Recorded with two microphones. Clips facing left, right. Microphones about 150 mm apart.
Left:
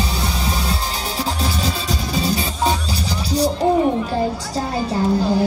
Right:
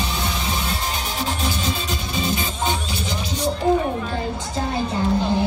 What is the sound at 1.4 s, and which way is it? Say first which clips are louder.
Music: left 2 dB; 35° left (ahead or behind).